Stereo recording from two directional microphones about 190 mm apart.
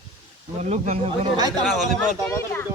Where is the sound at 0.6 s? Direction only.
35° right (ahead or behind).